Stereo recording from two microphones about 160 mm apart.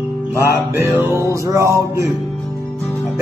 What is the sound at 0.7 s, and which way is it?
Music, 20° right (ahead or behind).